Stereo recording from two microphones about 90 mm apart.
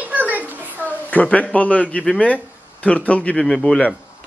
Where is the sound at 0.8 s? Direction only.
15° left (ahead or behind).